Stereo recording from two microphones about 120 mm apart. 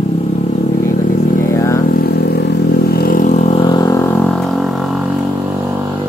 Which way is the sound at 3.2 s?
90° left.